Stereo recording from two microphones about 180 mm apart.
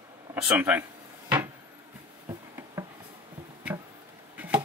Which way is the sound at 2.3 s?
15° right (ahead or behind).